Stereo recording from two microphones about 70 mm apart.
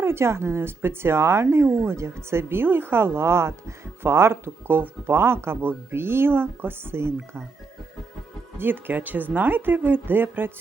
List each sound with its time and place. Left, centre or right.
0.0 s speech: right
8.5 s speech: right